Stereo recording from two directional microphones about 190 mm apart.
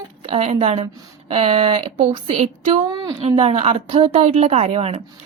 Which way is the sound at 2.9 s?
20° right (ahead or behind).